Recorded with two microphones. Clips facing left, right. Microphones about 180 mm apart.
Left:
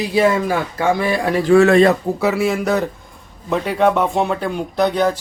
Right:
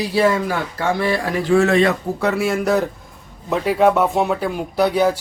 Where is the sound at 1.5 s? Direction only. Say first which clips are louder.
Left 4 dB; 65° left (ahead or behind).